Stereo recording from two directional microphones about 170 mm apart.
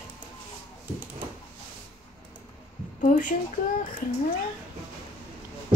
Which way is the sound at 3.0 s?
50° left (ahead or behind).